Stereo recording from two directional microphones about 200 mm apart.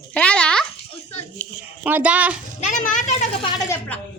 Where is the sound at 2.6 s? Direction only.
40° left (ahead or behind).